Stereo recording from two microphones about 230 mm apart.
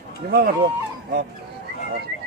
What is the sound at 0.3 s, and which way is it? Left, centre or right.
Speech, right.